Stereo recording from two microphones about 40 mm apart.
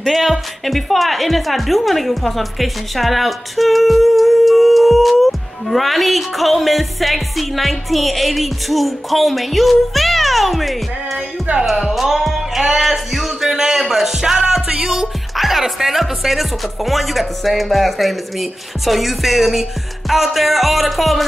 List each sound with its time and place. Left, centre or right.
0.0 s speech: centre
11.5 s speech: right
11.9 s music: centre
12.7 s speech: centre
15.3 s speech: centre